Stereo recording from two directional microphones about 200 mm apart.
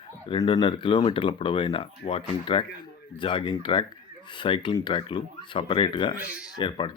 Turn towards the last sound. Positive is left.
turn(degrees=25)  # may be behind; listen again after turning